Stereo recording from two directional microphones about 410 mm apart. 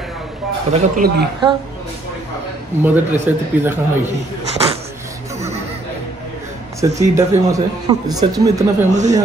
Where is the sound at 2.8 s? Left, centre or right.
Centre.